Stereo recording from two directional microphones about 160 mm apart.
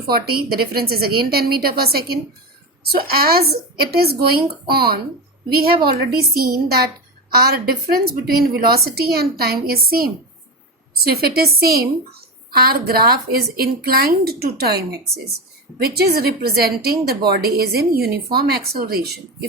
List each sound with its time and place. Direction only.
0.1 s a woman's voice: 70° right (ahead or behind)